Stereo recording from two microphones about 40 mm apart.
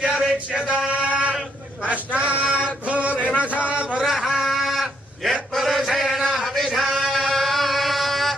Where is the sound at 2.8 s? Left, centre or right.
Right.